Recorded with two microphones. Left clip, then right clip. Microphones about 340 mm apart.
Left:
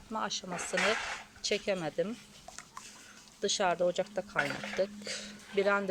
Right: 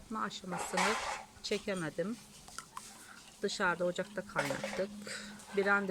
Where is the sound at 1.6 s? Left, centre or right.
Centre.